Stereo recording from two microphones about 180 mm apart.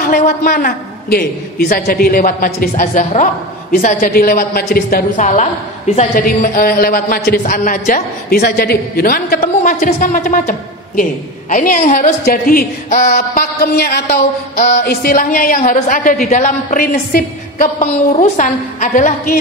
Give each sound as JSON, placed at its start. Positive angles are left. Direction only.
{"t": 0.1, "sound": "a woman's voice", "side_deg": 50}
{"t": 2.7, "sound": "a woman's voice", "side_deg": 45}
{"t": 6.2, "sound": "a woman's voice", "side_deg": 50}
{"t": 9.4, "sound": "a woman's voice", "side_deg": 40}
{"t": 18.1, "sound": "a woman's voice", "side_deg": 35}